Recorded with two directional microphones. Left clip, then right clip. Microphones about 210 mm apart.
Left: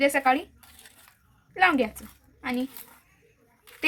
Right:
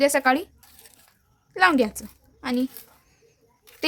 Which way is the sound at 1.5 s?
50° right (ahead or behind).